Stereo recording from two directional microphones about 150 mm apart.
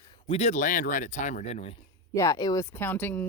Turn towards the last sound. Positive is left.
turn(degrees=15)  # may be behind; listen again after turning